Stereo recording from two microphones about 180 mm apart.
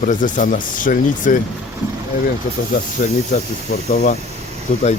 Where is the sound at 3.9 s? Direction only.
50° left (ahead or behind).